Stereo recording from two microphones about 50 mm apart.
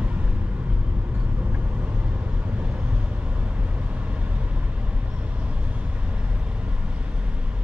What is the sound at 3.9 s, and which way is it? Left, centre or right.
Vehicle, right.